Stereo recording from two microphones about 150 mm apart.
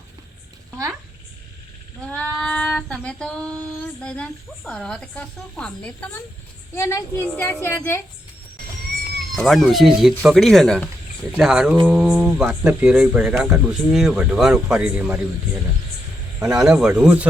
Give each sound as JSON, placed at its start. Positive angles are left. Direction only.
{"t": 2.0, "sound": "female singing", "side_deg": 10}
{"t": 4.0, "sound": "speech", "side_deg": 5}
{"t": 9.3, "sound": "speech", "side_deg": 0}
{"t": 16.4, "sound": "speech", "side_deg": -20}
{"t": 16.6, "sound": "speech", "side_deg": -5}